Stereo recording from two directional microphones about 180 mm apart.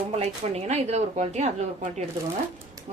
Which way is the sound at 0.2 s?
35° right (ahead or behind).